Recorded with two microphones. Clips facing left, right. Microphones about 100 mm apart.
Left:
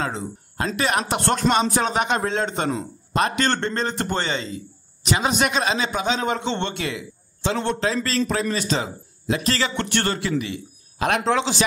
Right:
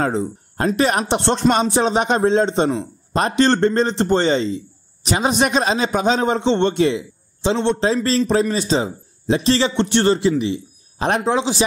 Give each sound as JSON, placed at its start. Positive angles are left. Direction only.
{"t": 0.7, "sound": "a man's voice", "side_deg": -35}
{"t": 11.2, "sound": "speech", "side_deg": -15}